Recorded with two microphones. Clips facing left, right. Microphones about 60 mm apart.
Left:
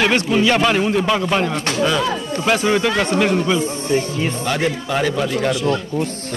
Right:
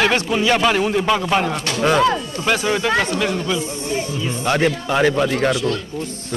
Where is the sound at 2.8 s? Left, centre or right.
Centre.